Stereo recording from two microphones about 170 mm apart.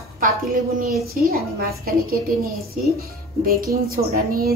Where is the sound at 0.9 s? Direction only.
Centre (ahead or behind).